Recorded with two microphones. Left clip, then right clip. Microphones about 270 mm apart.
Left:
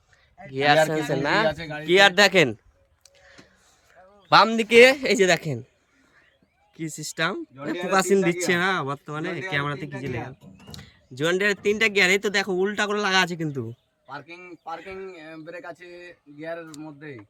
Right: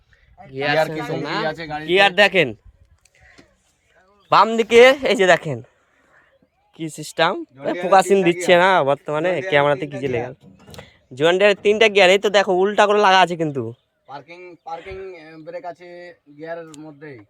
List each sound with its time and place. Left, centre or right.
0.5 s speech: centre
1.5 s speech: centre
1.9 s speech: centre
4.3 s speech: centre
6.7 s speech: centre
14.1 s speech: centre